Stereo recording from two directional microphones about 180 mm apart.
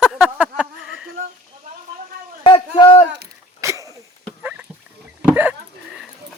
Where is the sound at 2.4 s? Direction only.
25° left (ahead or behind).